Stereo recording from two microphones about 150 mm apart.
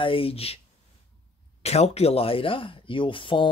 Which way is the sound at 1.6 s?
45° left (ahead or behind).